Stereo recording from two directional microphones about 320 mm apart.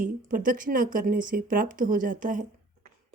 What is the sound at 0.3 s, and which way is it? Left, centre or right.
Speech, right.